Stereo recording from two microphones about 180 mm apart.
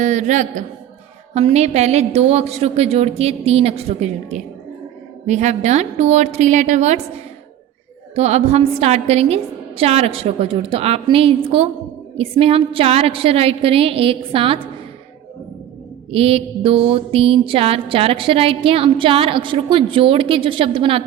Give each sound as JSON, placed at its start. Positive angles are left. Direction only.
{"t": 0.0, "sound": "a man's voice", "side_deg": -40}
{"t": 1.3, "sound": "mantra", "side_deg": -35}
{"t": 8.1, "sound": "mantra", "side_deg": -35}
{"t": 16.1, "sound": "mantra", "side_deg": -35}